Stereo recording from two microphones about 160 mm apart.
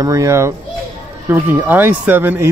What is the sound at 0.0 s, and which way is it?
Speech, 20° right (ahead or behind).